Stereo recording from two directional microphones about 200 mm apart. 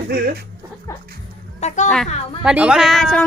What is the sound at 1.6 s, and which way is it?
Speech, 40° left (ahead or behind).